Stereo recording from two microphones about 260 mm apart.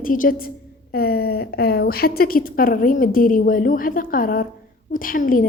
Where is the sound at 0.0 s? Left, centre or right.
Left.